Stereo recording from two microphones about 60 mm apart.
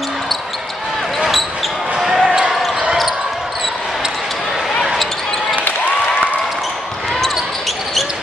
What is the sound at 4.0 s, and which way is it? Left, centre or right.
Basketball bounce, centre.